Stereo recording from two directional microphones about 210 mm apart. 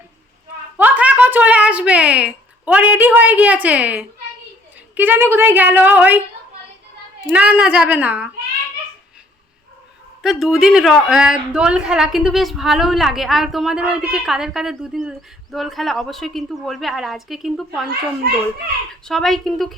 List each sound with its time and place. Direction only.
0.8 s a woman's voice: 10° right (ahead or behind)
7.3 s a woman's voice: 5° right (ahead or behind)
10.2 s a woman's voice: centre (ahead or behind)
19.0 s a woman's voice: centre (ahead or behind)